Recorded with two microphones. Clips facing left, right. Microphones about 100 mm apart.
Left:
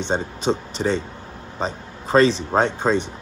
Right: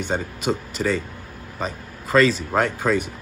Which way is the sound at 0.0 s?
25° left (ahead or behind).